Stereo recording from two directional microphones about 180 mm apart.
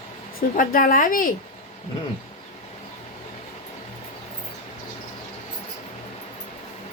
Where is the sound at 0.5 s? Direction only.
50° left (ahead or behind).